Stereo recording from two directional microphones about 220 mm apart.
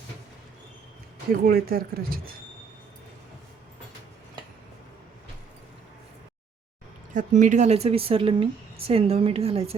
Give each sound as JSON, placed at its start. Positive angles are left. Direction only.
{"t": 1.3, "sound": "speech", "side_deg": -40}
{"t": 7.1, "sound": "speech", "side_deg": -35}